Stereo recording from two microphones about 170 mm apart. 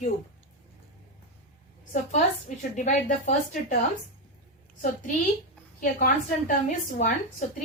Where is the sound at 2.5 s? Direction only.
45° left (ahead or behind).